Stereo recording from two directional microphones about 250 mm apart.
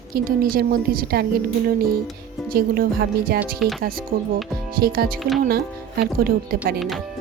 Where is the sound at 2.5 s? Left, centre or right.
Right.